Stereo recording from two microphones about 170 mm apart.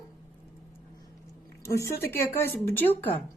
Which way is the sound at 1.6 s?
20° left (ahead or behind).